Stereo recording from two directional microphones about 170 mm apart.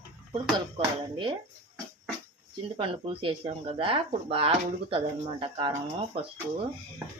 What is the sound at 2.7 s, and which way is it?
Speech, 30° right (ahead or behind).